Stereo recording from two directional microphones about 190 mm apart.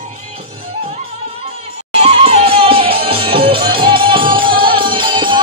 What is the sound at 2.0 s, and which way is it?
Music, 35° right (ahead or behind).